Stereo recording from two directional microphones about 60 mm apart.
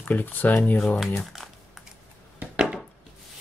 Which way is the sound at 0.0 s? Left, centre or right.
Left.